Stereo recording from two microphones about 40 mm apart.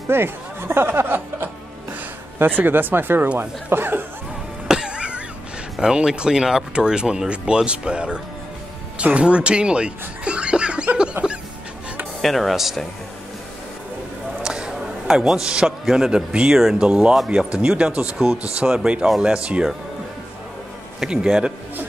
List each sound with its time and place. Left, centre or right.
0.1 s speech: right
2.5 s speech: right
4.6 s music: right
5.8 s speech: centre
11.2 s music: right
12.2 s speech: centre
14.4 s a man's voice: centre
17.9 s speech: right
19.0 s speech: centre
19.3 s speech: right
21.0 s speech: centre